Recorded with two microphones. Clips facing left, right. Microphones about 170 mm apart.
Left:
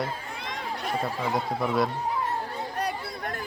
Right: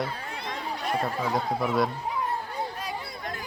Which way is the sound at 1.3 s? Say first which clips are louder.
Left 1 dB; centre (ahead or behind).